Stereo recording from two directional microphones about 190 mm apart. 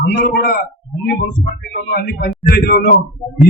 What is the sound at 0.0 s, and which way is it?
Speech, 55° left (ahead or behind).